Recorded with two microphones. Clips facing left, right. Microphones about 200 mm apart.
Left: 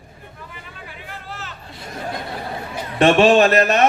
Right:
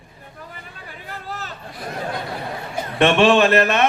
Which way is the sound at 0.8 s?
40° right (ahead or behind).